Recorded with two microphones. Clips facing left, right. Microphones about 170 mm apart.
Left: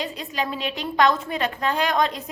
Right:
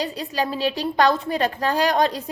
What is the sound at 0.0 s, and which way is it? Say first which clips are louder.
A woman's voice: right 3 dB; 35° right (ahead or behind).